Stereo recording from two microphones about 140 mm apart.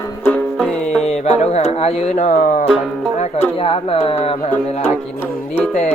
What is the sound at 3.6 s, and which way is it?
Speech, 40° left (ahead or behind).